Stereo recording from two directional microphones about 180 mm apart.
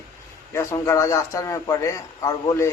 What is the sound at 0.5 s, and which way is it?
A man's voice, 15° left (ahead or behind).